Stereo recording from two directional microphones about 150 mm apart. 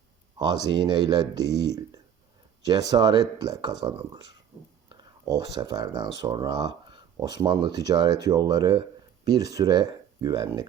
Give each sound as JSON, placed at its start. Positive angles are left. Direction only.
{"t": 0.3, "sound": "speech", "side_deg": -30}
{"t": 4.9, "sound": "a sound", "side_deg": -25}
{"t": 5.5, "sound": "speech", "side_deg": -30}